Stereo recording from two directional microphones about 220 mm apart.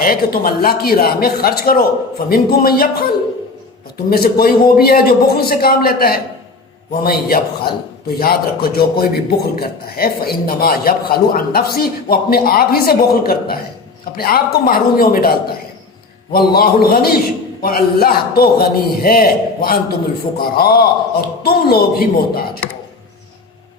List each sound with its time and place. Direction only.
0.0 s a man's voice: 40° left (ahead or behind)
4.1 s a man's voice: 45° left (ahead or behind)